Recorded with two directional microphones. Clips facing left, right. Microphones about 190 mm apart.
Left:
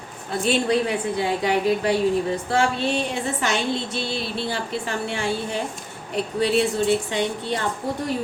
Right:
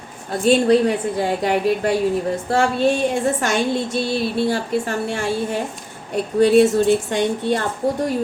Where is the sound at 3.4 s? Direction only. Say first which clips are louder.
Right 4 dB; 50° right (ahead or behind).